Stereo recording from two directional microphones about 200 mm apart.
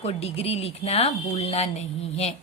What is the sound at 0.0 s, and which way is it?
Speech, 30° left (ahead or behind).